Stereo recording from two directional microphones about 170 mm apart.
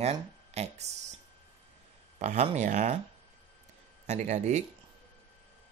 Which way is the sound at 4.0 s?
45° right (ahead or behind).